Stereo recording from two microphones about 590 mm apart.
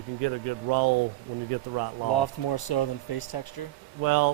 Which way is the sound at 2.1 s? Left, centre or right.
Left.